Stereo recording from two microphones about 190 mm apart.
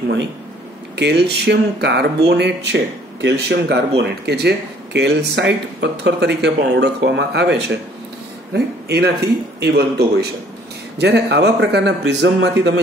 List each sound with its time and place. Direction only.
0.9 s speech: 60° right (ahead or behind)